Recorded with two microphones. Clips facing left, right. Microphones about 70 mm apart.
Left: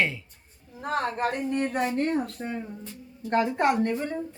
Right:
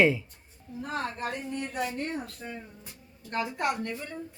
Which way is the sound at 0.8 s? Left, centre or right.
Left.